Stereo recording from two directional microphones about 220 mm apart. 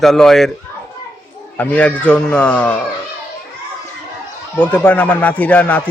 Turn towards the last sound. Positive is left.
turn(degrees=5)  # may be behind; listen again after turning